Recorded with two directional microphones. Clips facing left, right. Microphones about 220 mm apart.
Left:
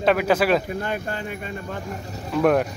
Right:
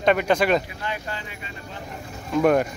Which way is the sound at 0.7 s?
50° left (ahead or behind).